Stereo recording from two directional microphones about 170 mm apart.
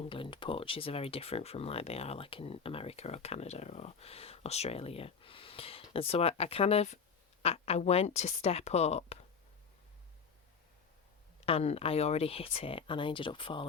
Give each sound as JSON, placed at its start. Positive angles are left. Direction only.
{"t": 0.0, "sound": "speech", "side_deg": 30}
{"t": 11.3, "sound": "speech", "side_deg": 35}